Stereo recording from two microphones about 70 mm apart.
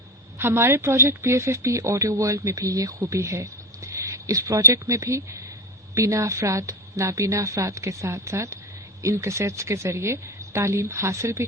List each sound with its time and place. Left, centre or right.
0.3 s a woman's voice: right